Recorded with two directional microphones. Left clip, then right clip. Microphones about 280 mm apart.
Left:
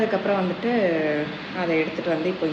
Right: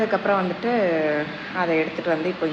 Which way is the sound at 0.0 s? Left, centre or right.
Centre.